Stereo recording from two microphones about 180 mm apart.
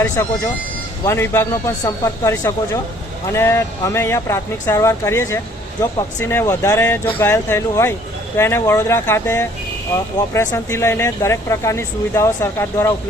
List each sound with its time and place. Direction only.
0.0 s speech: 15° left (ahead or behind)